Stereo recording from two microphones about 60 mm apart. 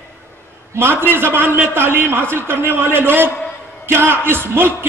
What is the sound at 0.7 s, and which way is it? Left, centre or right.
A man's voice, right.